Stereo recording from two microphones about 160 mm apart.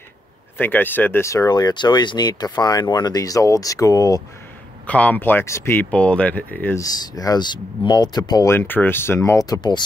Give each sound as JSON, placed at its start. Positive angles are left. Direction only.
{"t": 0.6, "sound": "speech", "side_deg": 10}
{"t": 4.8, "sound": "speech", "side_deg": 10}
{"t": 6.8, "sound": "speech", "side_deg": 25}